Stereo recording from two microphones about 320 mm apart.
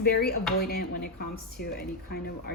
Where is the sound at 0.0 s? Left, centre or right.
Left.